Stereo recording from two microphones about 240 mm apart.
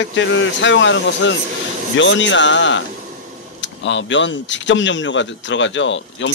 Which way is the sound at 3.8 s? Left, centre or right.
Left.